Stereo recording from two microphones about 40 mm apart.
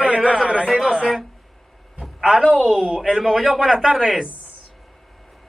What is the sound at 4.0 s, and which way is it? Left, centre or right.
Speech, centre.